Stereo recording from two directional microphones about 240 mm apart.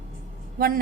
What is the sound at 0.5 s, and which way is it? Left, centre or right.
Speech, right.